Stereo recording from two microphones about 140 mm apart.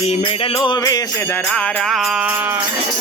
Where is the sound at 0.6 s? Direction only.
25° left (ahead or behind).